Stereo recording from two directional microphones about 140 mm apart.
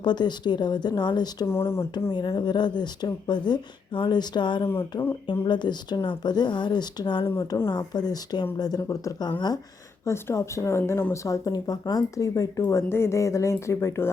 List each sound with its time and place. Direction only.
0.0 s speech: 30° left (ahead or behind)
1.5 s speech: 20° left (ahead or behind)
2.1 s speech: 35° left (ahead or behind)
4.6 s speech: 20° left (ahead or behind)
5.2 s speech: 35° left (ahead or behind)
7.3 s speech: 20° left (ahead or behind)